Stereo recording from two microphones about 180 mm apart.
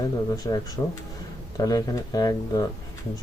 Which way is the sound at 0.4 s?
20° left (ahead or behind).